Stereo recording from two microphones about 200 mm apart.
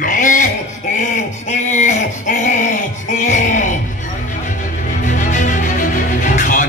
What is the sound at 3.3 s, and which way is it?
Music, 40° left (ahead or behind).